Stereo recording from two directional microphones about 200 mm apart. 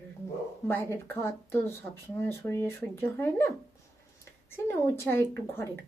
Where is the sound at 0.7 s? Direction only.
10° left (ahead or behind).